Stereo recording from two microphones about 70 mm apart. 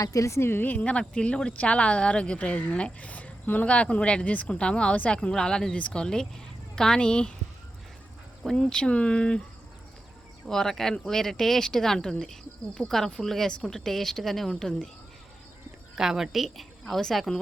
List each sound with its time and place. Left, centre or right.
0.0 s speech: left; by 7.3 s centre
8.4 s speech: centre
10.4 s speech: centre
16.0 s speech: centre